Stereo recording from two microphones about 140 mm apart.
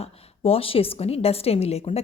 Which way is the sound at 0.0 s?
45° left (ahead or behind).